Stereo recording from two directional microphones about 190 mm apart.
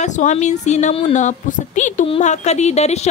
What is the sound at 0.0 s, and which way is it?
A woman's voice, 40° left (ahead or behind).